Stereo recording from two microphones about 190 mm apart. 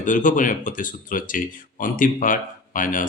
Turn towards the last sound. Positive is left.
turn(degrees=45)  # may be behind; listen again after turning